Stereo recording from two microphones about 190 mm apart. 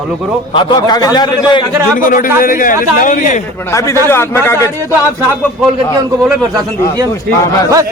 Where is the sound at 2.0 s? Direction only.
45° left (ahead or behind).